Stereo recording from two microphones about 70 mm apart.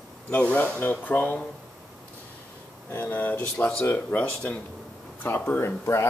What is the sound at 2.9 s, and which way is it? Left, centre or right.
Speech, left.